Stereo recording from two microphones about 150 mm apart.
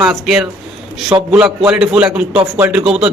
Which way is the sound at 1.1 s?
20° right (ahead or behind).